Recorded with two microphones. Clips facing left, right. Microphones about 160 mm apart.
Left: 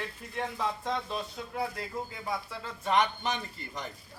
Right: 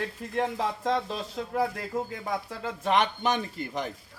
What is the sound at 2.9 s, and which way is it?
Speech, 80° right.